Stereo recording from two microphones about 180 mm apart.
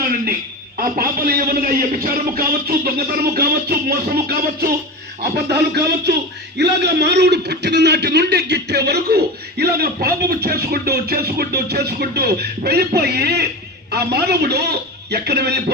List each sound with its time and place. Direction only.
0.8 s a man's voice: 55° right (ahead or behind)